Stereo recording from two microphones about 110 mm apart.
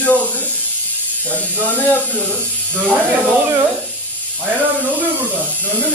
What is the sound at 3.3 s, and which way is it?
Speech, 15° right (ahead or behind).